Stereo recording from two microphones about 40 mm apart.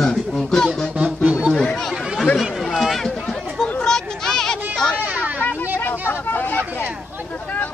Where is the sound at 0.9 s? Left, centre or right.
Right.